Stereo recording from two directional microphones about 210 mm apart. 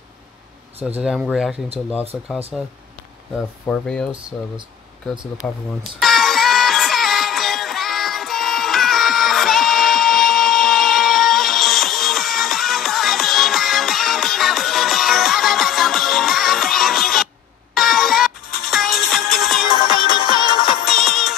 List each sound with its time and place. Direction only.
0.8 s speech: 5° right (ahead or behind)
5.4 s speech: 5° left (ahead or behind)
5.9 s music: centre (ahead or behind)
19.7 s music: 25° left (ahead or behind)
20.8 s music: centre (ahead or behind)